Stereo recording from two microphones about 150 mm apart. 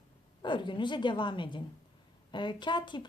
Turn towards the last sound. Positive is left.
turn(degrees=30)  # may be behind; listen again after turning